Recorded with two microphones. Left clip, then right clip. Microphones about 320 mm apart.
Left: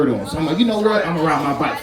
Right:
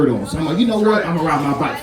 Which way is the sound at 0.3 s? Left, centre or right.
Left.